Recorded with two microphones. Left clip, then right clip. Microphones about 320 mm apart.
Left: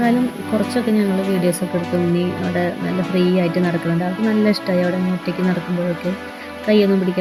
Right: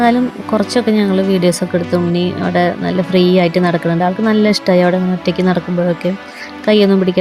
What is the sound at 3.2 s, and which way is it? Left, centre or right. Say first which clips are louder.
Speech: right 7 dB; right.